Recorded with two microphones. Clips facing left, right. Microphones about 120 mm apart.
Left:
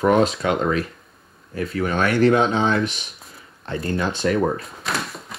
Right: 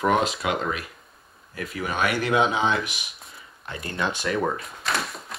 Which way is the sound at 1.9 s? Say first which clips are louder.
Left 7 dB; 10° right (ahead or behind).